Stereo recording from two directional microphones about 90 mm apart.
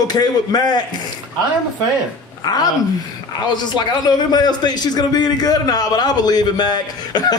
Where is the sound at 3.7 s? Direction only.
50° left (ahead or behind).